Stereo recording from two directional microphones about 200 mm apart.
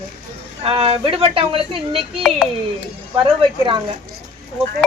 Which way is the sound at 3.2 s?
25° right (ahead or behind).